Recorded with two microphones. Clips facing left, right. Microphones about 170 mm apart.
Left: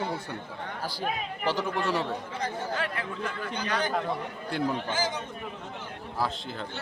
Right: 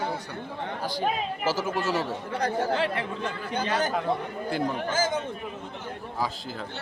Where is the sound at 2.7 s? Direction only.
30° right (ahead or behind).